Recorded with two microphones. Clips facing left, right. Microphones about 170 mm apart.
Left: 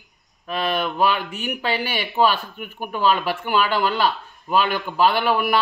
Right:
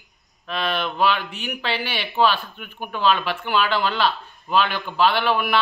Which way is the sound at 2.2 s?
10° left (ahead or behind).